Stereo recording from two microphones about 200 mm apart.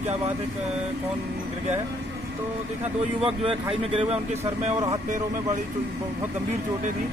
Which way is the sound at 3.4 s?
25° right (ahead or behind).